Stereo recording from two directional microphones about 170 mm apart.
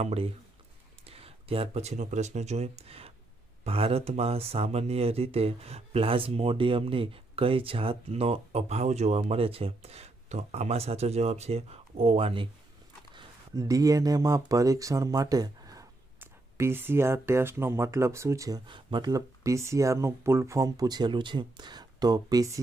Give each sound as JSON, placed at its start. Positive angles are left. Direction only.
{"t": 0.0, "sound": "speech", "side_deg": -35}
{"t": 13.1, "sound": "speech", "side_deg": -20}